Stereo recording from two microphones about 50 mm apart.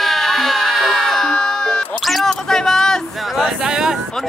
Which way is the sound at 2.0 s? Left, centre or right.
Centre.